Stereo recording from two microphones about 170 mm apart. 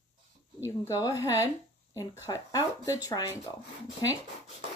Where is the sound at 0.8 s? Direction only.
20° left (ahead or behind).